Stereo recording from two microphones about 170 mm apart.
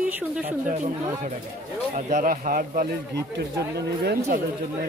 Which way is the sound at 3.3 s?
75° right (ahead or behind).